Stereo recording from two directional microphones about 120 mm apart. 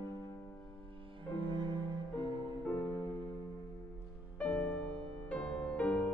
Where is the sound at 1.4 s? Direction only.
40° right (ahead or behind).